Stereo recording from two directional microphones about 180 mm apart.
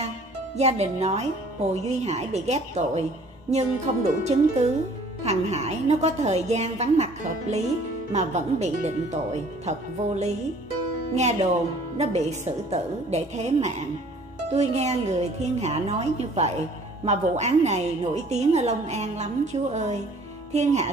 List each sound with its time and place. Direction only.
0.6 s a woman's voice: 35° right (ahead or behind)